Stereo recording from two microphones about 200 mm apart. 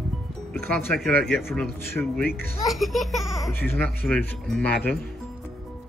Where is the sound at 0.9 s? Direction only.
Centre (ahead or behind).